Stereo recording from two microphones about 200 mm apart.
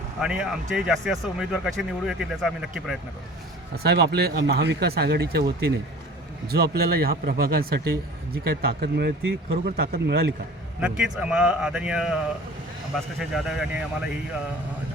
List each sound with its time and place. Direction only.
0.2 s speech: 5° right (ahead or behind)
3.8 s a man's voice: 55° right (ahead or behind)
10.8 s speech: 5° right (ahead or behind)